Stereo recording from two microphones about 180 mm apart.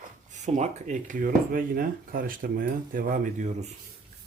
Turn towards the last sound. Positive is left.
turn(degrees=-40)  # may be behind; listen again after turning